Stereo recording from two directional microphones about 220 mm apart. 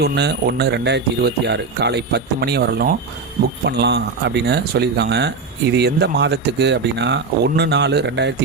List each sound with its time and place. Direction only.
0.0 s speech: 50° right (ahead or behind)